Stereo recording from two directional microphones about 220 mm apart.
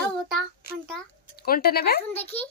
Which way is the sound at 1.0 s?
Centre (ahead or behind).